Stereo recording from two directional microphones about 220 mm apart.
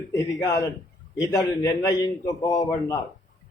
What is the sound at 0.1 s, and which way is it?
Speech, 15° left (ahead or behind).